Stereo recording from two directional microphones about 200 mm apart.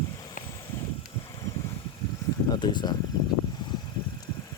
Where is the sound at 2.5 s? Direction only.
20° left (ahead or behind).